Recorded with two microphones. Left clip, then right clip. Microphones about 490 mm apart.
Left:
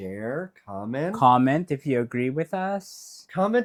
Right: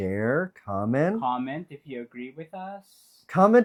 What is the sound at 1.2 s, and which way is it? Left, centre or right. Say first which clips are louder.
Speech: left 10 dB; left.